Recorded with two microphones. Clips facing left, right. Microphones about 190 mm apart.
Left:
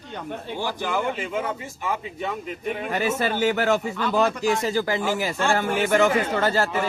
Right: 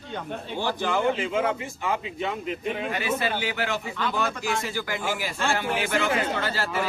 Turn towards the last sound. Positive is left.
turn(degrees=45)  # may be behind; listen again after turning